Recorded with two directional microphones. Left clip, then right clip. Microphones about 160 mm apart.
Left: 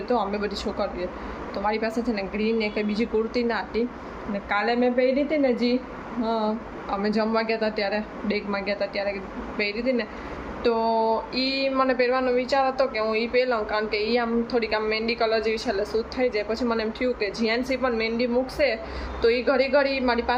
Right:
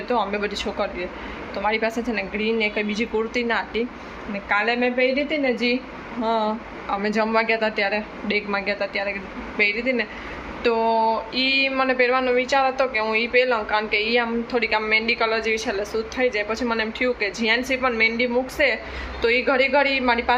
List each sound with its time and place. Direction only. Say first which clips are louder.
0.1 s a woman's voice: right 2 dB; 10° left (ahead or behind)